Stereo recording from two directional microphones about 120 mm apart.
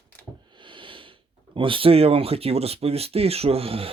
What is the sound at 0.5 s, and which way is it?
Speech, 45° right (ahead or behind).